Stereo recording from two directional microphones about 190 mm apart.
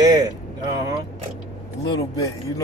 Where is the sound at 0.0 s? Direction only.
20° right (ahead or behind).